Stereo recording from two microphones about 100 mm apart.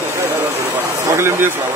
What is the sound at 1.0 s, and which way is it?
Speech, 30° right (ahead or behind).